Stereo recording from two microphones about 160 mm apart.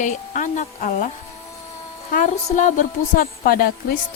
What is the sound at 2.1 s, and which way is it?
A woman's voice, 50° left (ahead or behind).